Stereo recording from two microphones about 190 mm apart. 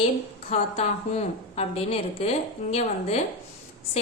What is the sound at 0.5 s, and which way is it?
A woman's voice, 35° left (ahead or behind).